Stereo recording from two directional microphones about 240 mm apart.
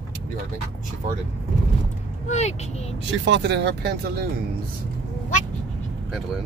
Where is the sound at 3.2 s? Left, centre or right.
Right.